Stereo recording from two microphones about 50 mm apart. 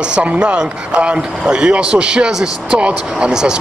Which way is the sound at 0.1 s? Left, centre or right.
Right.